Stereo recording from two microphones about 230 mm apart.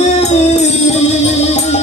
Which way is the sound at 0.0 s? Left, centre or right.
Left.